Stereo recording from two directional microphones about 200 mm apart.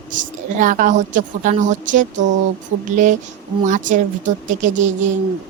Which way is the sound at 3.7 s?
40° right (ahead or behind).